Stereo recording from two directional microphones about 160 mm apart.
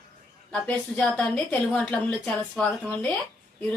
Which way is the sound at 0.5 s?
5° left (ahead or behind).